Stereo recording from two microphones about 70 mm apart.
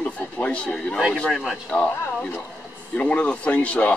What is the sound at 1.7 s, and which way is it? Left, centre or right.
Speech, centre.